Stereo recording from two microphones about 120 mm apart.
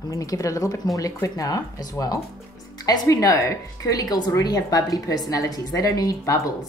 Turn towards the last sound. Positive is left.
turn(degrees=30)  # may be behind; listen again after turning